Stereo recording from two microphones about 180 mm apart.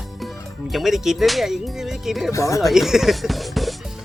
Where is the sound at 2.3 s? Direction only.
15° left (ahead or behind).